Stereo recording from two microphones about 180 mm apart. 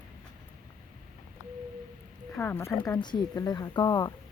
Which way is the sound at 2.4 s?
15° left (ahead or behind).